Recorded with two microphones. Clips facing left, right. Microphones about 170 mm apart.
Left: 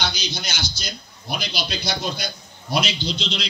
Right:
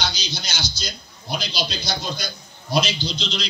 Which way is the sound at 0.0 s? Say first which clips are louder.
Left 1 dB; 55° left (ahead or behind).